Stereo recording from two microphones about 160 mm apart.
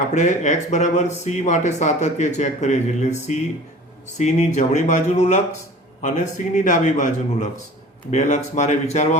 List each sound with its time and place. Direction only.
0.1 s speech: 45° left (ahead or behind)